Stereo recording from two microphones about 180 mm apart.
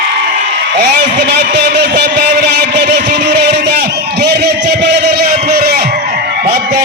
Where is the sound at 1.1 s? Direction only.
65° right (ahead or behind).